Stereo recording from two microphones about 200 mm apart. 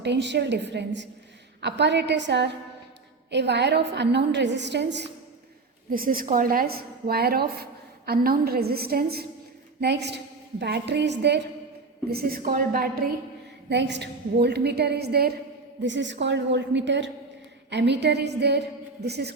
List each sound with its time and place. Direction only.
0.0 s a woman's voice: 60° right (ahead or behind)
5.9 s a woman's voice: 45° right (ahead or behind)
12.1 s a woman's voice: 45° right (ahead or behind)
13.7 s a woman's voice: 60° right (ahead or behind)
15.8 s a woman's voice: 65° right (ahead or behind)